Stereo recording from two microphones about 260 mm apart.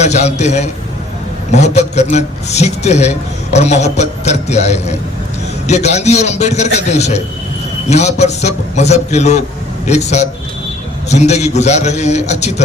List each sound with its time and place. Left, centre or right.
0.0 s a man's voice: left